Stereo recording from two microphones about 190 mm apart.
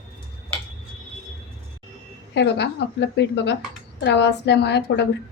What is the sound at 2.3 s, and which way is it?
A woman's voice, 65° left (ahead or behind).